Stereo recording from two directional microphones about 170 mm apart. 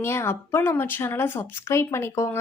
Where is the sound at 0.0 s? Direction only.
15° left (ahead or behind).